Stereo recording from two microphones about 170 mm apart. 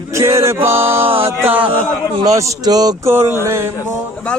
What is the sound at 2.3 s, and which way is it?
Speech, 20° right (ahead or behind).